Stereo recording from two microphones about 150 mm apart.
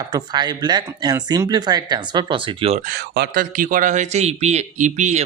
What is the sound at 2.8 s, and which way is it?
A man's voice, 80° right.